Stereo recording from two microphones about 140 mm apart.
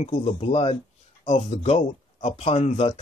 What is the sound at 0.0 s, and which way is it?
Speech, 45° left (ahead or behind).